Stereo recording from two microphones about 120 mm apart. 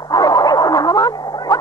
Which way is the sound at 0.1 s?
35° left (ahead or behind).